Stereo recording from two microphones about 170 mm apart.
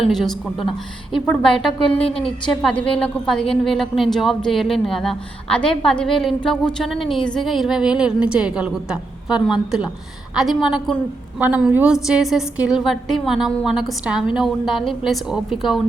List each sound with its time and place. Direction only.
0.1 s a woman's voice: centre (ahead or behind)